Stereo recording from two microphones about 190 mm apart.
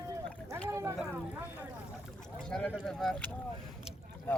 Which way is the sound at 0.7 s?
15° right (ahead or behind).